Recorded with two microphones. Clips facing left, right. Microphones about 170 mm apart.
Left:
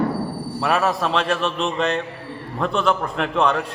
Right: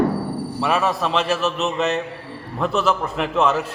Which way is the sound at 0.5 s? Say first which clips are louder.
Left 1 dB; centre (ahead or behind).